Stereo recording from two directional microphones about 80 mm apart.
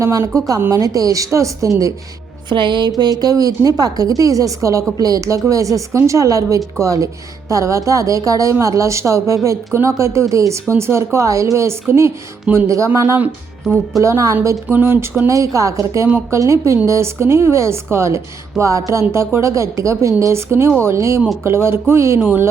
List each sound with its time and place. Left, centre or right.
0.0 s speech: right
2.5 s music: right
3.0 s speech: right
14.0 s speech: right
14.7 s a sound: right
15.3 s speech: right
22.2 s a sound: right